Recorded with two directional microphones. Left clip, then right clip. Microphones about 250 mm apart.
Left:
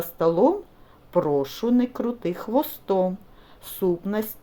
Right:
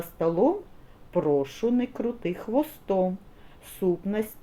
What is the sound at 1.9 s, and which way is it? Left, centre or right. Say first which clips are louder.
Speech: left 3 dB; centre.